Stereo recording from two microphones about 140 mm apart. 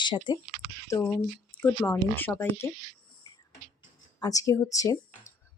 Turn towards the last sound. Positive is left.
turn(degrees=25)  # may be behind; listen again after turning